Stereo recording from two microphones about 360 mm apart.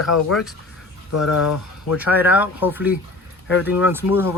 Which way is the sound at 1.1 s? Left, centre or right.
Left.